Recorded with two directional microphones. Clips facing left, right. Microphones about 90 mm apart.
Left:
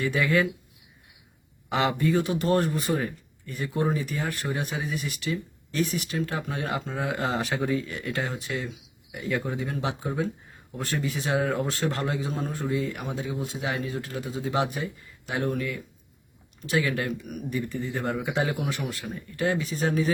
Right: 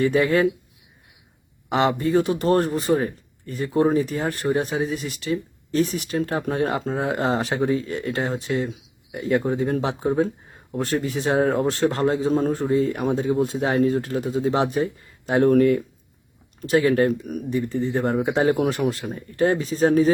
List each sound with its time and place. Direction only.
0.0 s speech: 35° right (ahead or behind)
1.7 s speech: 30° right (ahead or behind)